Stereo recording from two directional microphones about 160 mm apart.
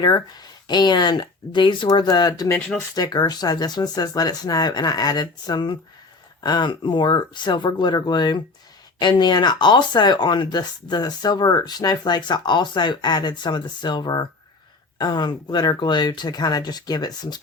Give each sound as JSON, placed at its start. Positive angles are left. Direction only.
{"t": 0.0, "sound": "speech", "side_deg": 25}